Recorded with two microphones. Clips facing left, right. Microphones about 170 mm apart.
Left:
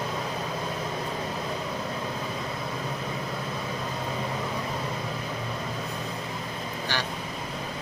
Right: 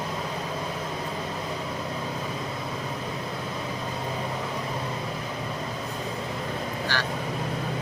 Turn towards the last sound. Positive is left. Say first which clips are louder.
# right 1 dB
turn(degrees=20)  # may be behind; listen again after turning